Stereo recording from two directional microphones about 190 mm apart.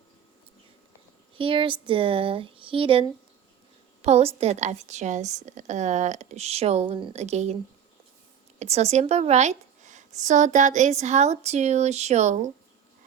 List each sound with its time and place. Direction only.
1.4 s speech: 30° right (ahead or behind)
8.5 s speech: 35° right (ahead or behind)